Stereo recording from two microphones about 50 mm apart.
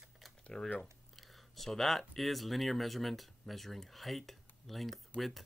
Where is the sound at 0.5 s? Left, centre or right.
Centre.